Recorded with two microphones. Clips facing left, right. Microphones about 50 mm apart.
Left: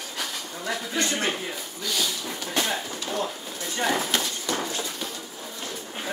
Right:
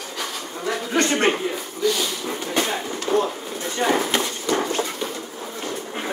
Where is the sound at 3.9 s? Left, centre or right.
Right.